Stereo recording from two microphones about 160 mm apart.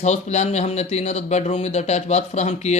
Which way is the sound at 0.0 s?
45° left (ahead or behind).